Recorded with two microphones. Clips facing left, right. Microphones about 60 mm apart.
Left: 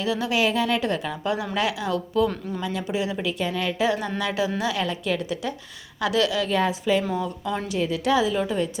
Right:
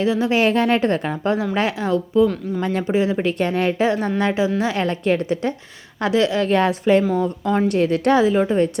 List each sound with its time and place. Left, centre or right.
0.0 s speech: right
0.3 s speech: right
3.4 s a woman's voice: right
4.8 s a woman's voice: right
6.0 s speech: right
6.4 s a woman's voice: right
7.2 s speech: right
7.7 s a woman's voice: right
8.3 s speech: right